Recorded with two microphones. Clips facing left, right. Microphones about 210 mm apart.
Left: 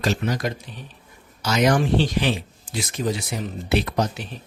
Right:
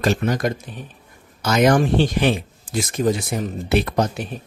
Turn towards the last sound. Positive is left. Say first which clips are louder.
# right 3 dB
turn(degrees=-50)  # may be behind; listen again after turning